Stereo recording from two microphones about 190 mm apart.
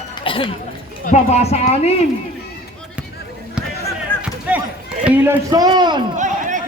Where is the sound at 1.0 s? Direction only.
35° left (ahead or behind).